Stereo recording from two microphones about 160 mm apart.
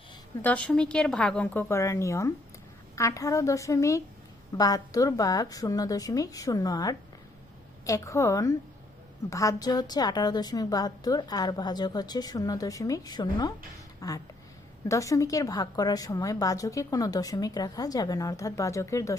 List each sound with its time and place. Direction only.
0.4 s a woman's voice: 10° left (ahead or behind)